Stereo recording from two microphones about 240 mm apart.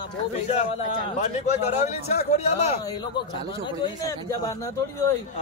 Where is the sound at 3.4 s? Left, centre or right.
Left.